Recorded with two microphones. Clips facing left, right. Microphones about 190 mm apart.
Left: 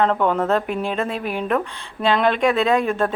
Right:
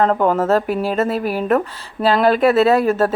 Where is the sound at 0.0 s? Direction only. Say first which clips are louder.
Right 3 dB; 40° right (ahead or behind).